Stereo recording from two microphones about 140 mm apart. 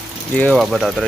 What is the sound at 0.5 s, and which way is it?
Speech, centre (ahead or behind).